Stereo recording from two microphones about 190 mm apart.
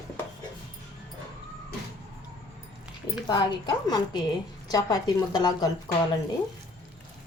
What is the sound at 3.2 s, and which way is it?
A woman's voice, 20° left (ahead or behind).